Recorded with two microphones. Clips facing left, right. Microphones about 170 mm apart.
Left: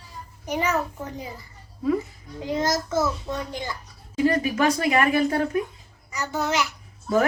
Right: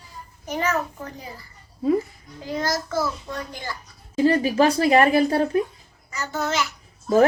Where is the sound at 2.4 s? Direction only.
20° left (ahead or behind).